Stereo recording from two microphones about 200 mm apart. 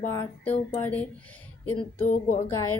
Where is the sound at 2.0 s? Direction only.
40° left (ahead or behind).